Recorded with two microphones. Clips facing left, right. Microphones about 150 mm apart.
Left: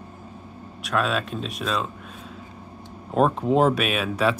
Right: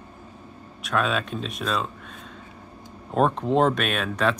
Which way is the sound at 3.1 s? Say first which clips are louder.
Left 1 dB; 5° left (ahead or behind).